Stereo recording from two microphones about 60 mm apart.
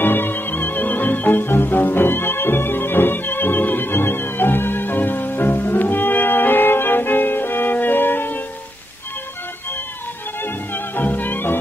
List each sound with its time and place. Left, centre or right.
0.0 s music: left
10.4 s music: left